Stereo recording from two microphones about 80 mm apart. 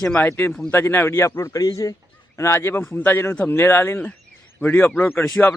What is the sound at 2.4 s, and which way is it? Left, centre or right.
Speech, left.